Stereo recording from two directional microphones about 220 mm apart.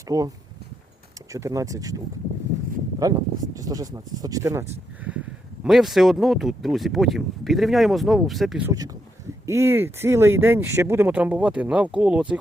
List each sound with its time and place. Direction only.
0.1 s speech: 15° right (ahead or behind)
1.3 s speech: 15° right (ahead or behind)
3.0 s speech: 15° right (ahead or behind)
5.6 s speech: centre (ahead or behind)